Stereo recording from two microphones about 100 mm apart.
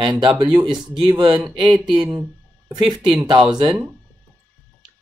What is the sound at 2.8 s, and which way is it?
Speech, 50° right (ahead or behind).